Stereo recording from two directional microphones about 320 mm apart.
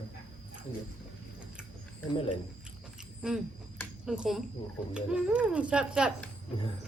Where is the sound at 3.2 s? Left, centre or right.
Centre.